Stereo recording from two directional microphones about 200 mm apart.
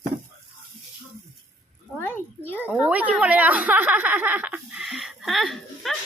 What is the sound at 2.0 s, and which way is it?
Speech, 10° left (ahead or behind).